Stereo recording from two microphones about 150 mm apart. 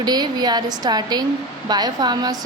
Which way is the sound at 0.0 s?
25° right (ahead or behind).